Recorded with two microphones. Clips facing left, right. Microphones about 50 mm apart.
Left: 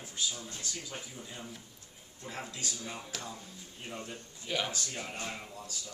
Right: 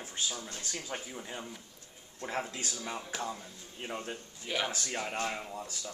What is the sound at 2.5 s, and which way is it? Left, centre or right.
Speech, right.